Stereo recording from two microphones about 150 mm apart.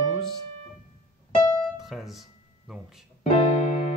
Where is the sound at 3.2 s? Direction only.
50° left (ahead or behind).